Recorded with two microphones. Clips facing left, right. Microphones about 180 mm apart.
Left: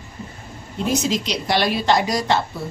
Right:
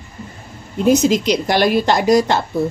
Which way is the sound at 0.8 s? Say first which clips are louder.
Right 8 dB; 50° right (ahead or behind).